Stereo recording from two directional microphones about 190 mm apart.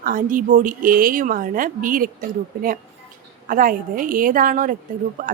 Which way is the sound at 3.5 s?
45° right (ahead or behind).